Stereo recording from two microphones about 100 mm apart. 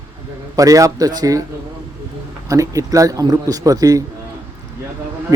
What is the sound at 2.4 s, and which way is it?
A man's voice, 35° right (ahead or behind).